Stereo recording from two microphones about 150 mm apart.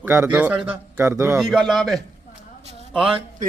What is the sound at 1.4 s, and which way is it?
Speech, centre (ahead or behind).